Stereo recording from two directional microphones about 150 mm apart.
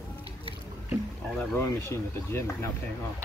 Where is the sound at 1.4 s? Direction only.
20° left (ahead or behind).